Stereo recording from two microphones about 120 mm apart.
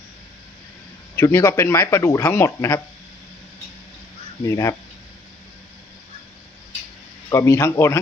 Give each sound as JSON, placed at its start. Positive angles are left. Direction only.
{"t": 1.1, "sound": "speech", "side_deg": 25}
{"t": 4.4, "sound": "speech", "side_deg": 25}
{"t": 7.3, "sound": "speech", "side_deg": 25}